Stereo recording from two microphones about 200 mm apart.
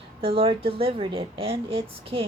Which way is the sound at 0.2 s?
30° right (ahead or behind).